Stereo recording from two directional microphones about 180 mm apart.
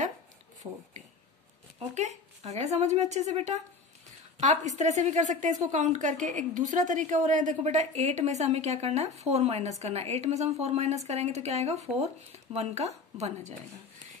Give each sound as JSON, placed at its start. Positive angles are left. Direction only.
{"t": 0.6, "sound": "a woman's voice", "side_deg": -30}